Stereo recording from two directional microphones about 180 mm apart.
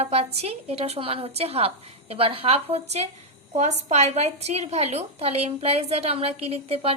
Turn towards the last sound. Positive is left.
turn(degrees=-35)  # may be behind; listen again after turning